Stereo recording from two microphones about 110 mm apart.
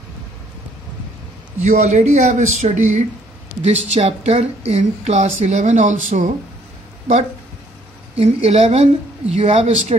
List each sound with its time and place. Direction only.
1.6 s speech: 90° right
3.6 s a woman's voice: 75° right (ahead or behind); by 6.3 s 90° right
8.2 s a woman's voice: 70° right (ahead or behind)